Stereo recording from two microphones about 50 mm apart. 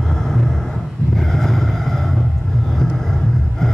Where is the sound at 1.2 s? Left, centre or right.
Centre.